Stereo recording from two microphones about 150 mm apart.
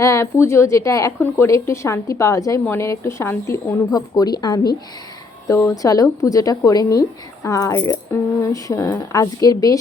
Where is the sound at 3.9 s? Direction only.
25° left (ahead or behind).